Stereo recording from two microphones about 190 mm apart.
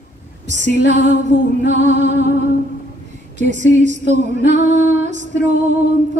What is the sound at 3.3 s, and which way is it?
Female singing, 40° right (ahead or behind).